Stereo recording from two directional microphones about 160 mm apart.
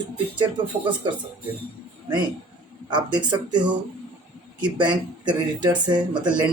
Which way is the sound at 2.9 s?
30° right (ahead or behind).